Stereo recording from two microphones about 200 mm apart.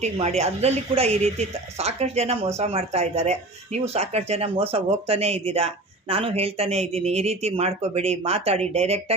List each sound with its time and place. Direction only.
0.0 s speech: 30° right (ahead or behind)